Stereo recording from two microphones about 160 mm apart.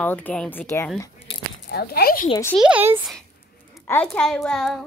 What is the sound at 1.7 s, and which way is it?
Speech, 75° left (ahead or behind).